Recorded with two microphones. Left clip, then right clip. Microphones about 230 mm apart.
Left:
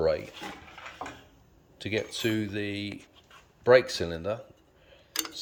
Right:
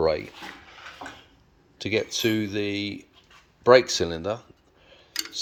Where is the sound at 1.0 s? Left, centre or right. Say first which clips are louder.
Even; left.